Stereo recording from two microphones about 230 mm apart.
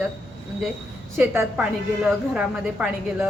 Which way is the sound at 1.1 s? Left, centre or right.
Centre.